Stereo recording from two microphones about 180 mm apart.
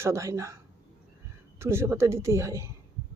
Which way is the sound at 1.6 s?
15° right (ahead or behind).